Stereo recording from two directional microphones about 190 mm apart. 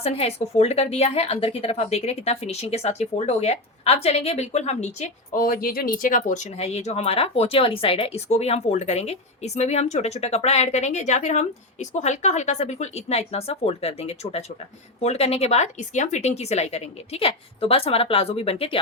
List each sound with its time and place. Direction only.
0.0 s a woman's voice: 35° left (ahead or behind)